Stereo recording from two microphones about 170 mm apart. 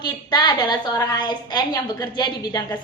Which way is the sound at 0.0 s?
25° left (ahead or behind).